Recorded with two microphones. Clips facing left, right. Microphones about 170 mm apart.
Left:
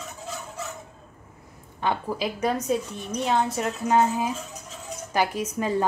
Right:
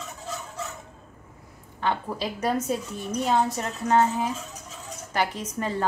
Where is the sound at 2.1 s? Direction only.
Centre (ahead or behind).